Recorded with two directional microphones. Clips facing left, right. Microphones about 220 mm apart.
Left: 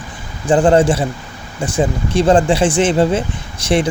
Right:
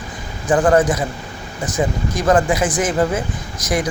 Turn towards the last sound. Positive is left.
turn(degrees=30)  # may be behind; listen again after turning